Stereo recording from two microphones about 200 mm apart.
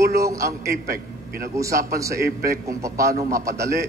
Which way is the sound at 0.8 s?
50° right (ahead or behind).